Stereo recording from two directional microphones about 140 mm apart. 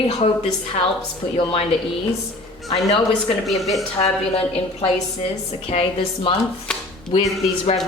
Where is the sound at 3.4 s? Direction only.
Centre (ahead or behind).